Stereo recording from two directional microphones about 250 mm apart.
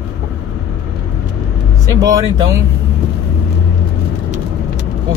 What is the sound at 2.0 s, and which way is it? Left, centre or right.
Speech, centre.